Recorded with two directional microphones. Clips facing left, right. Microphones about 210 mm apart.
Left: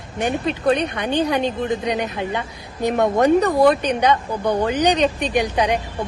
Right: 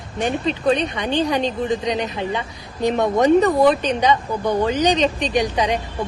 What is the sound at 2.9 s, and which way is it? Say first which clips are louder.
Speech: even; 5° left (ahead or behind).